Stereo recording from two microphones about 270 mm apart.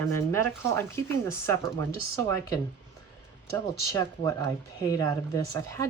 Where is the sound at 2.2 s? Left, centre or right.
Centre.